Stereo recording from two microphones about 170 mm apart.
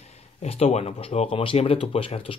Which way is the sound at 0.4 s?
35° left (ahead or behind).